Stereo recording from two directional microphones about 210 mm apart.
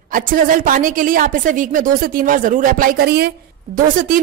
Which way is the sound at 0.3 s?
40° right (ahead or behind).